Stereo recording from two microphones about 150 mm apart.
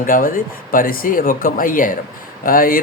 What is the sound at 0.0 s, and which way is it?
Speech, 70° left (ahead or behind).